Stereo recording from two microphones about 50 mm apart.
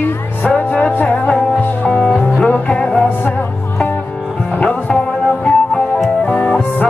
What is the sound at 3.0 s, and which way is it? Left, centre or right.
Music, left.